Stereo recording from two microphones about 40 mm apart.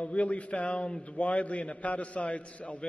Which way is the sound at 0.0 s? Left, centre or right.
Left.